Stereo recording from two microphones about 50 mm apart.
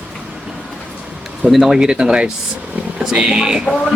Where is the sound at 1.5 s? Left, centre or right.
Centre.